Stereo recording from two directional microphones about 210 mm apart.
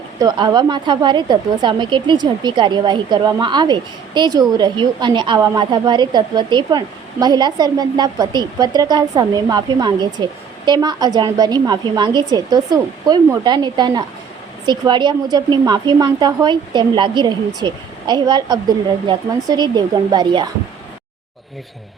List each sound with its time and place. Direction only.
0.2 s a woman's voice: 20° right (ahead or behind)